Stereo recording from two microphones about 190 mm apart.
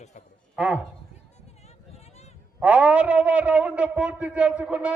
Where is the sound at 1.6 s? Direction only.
35° left (ahead or behind).